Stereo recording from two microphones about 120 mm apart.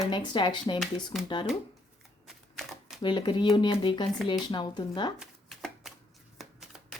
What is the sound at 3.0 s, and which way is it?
Speech, 40° left (ahead or behind).